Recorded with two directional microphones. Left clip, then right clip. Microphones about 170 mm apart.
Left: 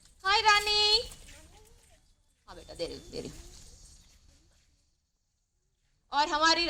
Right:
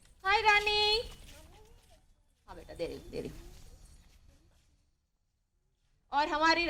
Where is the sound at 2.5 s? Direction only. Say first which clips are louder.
Left 1 dB; 15° right (ahead or behind).